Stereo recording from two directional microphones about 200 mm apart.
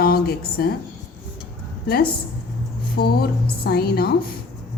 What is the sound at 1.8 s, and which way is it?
A woman's voice, 50° left (ahead or behind).